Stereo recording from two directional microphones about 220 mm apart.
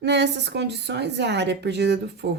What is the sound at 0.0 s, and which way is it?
Speech, 50° right (ahead or behind).